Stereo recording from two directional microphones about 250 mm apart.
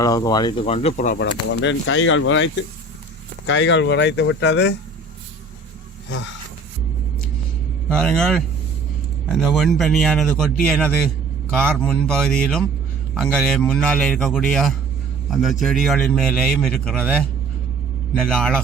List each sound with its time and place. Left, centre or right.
0.0 s speech: centre; by 1.2 s left
1.2 s speech: left
7.9 s a man's voice: centre
18.1 s a man's voice: centre